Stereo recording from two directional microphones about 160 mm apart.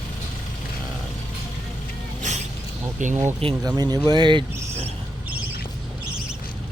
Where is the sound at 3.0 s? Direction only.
50° right (ahead or behind).